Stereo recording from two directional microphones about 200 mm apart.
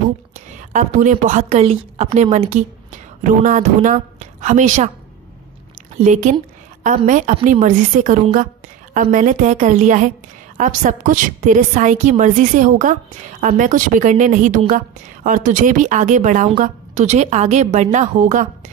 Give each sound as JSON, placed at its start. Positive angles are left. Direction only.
{"t": 0.6, "sound": "a woman's voice", "side_deg": -40}
{"t": 6.3, "sound": "a woman's voice", "side_deg": -40}